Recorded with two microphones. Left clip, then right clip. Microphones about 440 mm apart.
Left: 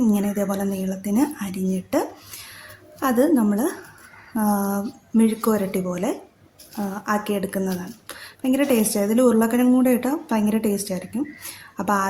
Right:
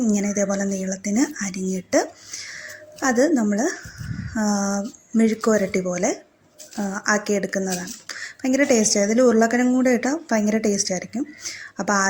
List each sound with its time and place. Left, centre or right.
0.0 s speech: left
2.5 s music: left
4.4 s speech: left